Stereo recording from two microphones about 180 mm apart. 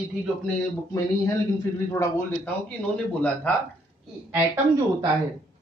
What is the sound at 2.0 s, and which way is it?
Speech, 15° left (ahead or behind).